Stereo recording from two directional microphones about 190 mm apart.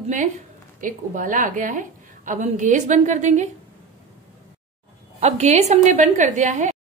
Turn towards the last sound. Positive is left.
turn(degrees=-40)  # may be behind; listen again after turning